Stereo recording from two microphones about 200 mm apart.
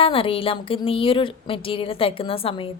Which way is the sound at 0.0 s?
25° left (ahead or behind).